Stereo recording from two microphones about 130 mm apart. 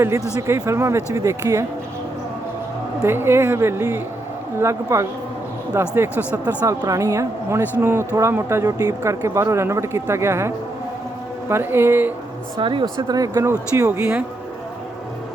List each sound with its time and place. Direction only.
0.3 s speech: 25° right (ahead or behind)
3.0 s speech: 20° right (ahead or behind)
12.5 s speech: 40° right (ahead or behind); by 14.3 s 15° right (ahead or behind)